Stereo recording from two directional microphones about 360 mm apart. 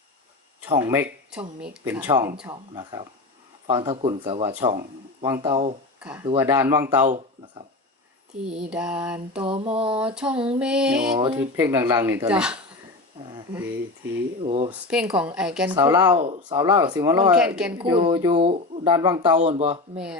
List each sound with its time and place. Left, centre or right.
0.7 s speech: centre
6.0 s speech: centre
7.0 s speech: centre
8.6 s speech: centre
9.4 s speech: centre
10.2 s speech: centre
13.2 s a sound: centre
14.4 s speech: centre
14.7 s speech: centre
17.7 s speech: centre